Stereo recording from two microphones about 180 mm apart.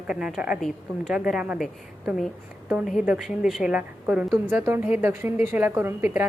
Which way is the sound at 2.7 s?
10° right (ahead or behind).